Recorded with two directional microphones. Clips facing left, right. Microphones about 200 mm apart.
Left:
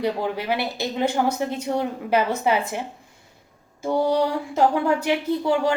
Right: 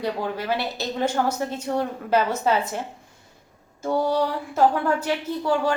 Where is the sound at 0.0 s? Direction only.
15° left (ahead or behind).